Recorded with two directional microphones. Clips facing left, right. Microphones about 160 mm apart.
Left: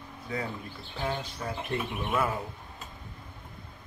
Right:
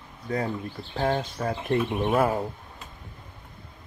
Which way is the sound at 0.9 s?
50° right (ahead or behind).